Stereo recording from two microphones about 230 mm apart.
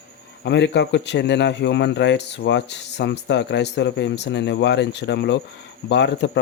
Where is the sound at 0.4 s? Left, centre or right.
Left.